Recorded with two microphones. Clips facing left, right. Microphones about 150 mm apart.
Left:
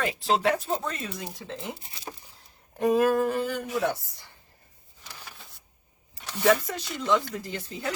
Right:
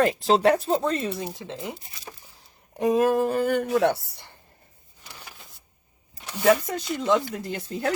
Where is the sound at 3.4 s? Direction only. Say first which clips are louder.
Right 6 dB; 60° right (ahead or behind).